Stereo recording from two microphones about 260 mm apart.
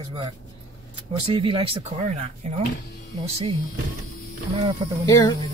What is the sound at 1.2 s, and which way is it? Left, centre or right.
Speech, centre.